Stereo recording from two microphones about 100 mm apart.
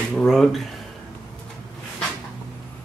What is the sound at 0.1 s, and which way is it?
Speech, 5° left (ahead or behind).